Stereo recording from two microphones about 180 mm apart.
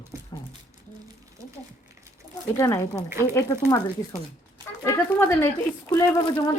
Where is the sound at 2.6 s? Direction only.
15° left (ahead or behind).